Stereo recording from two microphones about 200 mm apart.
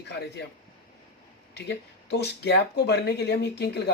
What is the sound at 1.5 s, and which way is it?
Speech, 55° left (ahead or behind).